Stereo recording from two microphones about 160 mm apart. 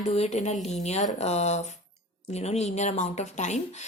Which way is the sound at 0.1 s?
40° left (ahead or behind).